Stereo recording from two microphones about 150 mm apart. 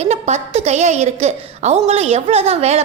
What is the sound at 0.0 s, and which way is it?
A woman's voice, 50° right (ahead or behind).